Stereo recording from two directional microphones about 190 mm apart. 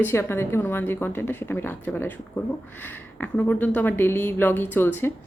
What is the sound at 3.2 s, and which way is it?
A woman's voice, 5° left (ahead or behind).